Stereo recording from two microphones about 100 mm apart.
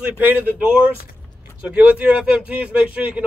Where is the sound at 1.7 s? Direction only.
15° right (ahead or behind).